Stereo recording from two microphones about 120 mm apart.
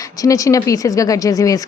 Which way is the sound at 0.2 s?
25° left (ahead or behind).